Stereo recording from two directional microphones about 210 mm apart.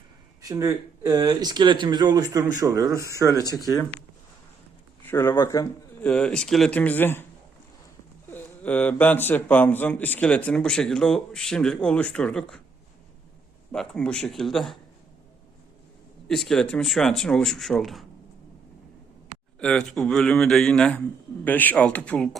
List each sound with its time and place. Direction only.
0.4 s speech: 15° right (ahead or behind)
5.0 s a man's voice: 10° left (ahead or behind)
8.3 s a man's voice: 10° left (ahead or behind)
13.7 s a man's voice: 5° left (ahead or behind)
16.3 s a man's voice: centre (ahead or behind)
19.5 s a man's voice: 5° left (ahead or behind)